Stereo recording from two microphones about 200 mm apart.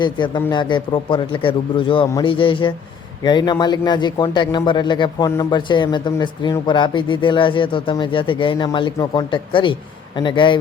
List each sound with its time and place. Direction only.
0.0 s a man's voice: 20° left (ahead or behind)